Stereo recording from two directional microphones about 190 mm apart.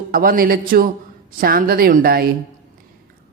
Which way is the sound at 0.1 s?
50° right (ahead or behind).